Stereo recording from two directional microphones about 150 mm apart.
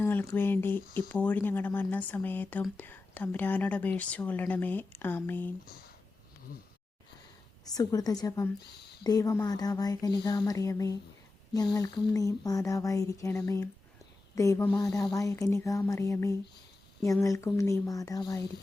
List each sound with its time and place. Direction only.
0.0 s a sound: 15° left (ahead or behind)
0.3 s speech: 15° left (ahead or behind)
7.6 s speech: 25° left (ahead or behind)